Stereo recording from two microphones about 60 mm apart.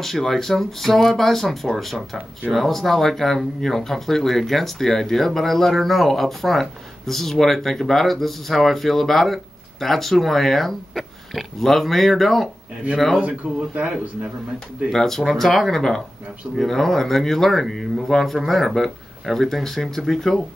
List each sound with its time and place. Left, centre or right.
0.0 s speech: centre
13.7 s speech: centre
14.9 s speech: centre